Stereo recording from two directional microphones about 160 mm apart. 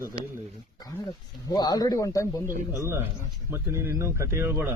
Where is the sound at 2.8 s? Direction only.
15° right (ahead or behind).